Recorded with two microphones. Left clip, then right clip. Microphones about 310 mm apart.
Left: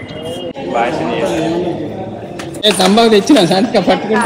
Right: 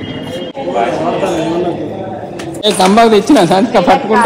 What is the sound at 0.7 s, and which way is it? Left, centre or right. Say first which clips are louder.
Speech: right 1 dB; centre.